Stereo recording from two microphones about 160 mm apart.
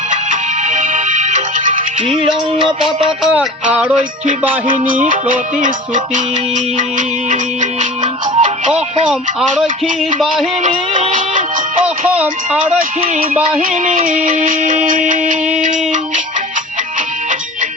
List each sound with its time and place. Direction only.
0.1 s music: 55° right (ahead or behind)
2.0 s music: 30° right (ahead or behind)
3.3 s music: 10° right (ahead or behind)
4.7 s music: 60° right (ahead or behind)
7.3 s music: 50° right (ahead or behind)
10.7 s music: 35° right (ahead or behind)
12.1 s music: 5° right (ahead or behind)
13.6 s music: 60° right (ahead or behind)